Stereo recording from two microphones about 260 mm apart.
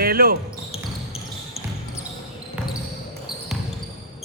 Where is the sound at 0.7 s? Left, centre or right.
Left.